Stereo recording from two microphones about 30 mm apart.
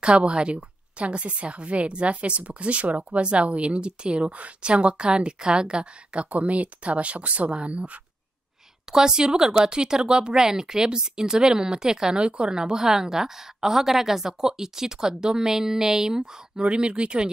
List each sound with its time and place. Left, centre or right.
0.0 s a woman's voice: right
6.3 s a woman's voice: right
8.9 s speech: right
12.2 s a woman's voice: right
16.5 s a woman's voice: right